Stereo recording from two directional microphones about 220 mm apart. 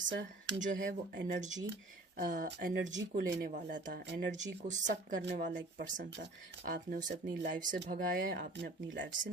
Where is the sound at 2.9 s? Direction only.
55° right (ahead or behind).